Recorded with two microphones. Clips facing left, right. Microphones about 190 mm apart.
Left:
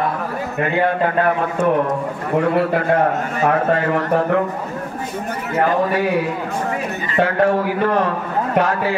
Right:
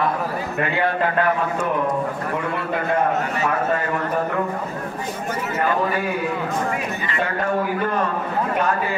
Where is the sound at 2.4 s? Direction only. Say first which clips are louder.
Left 8 dB; 70° left (ahead or behind).